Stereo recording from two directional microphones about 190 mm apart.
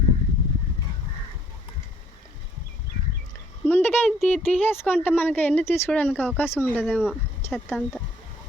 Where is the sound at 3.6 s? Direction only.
10° left (ahead or behind).